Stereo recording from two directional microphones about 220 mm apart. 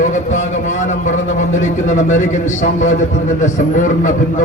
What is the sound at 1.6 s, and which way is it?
A man's voice, 35° left (ahead or behind).